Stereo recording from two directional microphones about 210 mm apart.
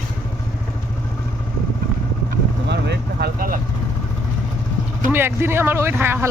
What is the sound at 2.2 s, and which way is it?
Vehicle, 50° right (ahead or behind).